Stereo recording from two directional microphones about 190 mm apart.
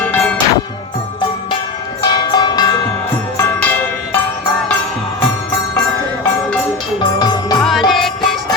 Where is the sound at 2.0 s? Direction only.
20° left (ahead or behind).